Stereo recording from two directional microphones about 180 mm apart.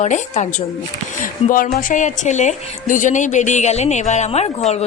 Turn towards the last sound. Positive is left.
turn(degrees=35)  # may be behind; listen again after turning